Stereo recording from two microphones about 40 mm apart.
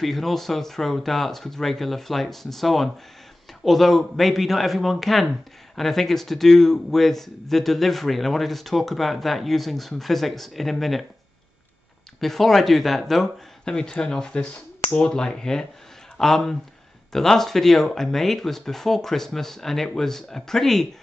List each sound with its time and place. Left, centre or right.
0.0 s a man's voice: centre
12.2 s a man's voice: centre
13.7 s speech: centre